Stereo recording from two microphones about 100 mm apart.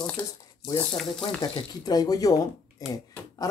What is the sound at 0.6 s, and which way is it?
Speech, 45° left (ahead or behind).